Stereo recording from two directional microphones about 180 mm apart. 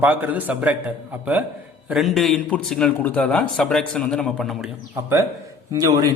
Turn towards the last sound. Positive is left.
turn(degrees=-20)  # may be behind; listen again after turning